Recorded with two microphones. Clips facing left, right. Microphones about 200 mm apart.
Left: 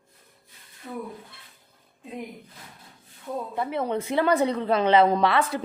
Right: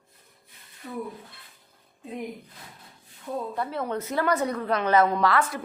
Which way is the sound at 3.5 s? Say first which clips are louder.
Left 5 dB; 20° left (ahead or behind).